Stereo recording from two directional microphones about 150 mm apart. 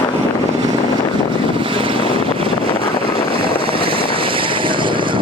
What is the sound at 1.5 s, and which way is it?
Vehicle, 35° right (ahead or behind).